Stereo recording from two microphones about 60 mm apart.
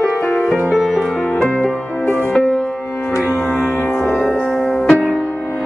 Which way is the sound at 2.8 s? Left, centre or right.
Left.